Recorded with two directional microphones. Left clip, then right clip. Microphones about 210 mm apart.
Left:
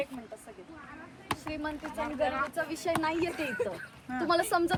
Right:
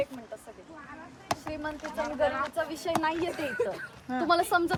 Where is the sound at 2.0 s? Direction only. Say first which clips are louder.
Right 3 dB; 55° right (ahead or behind).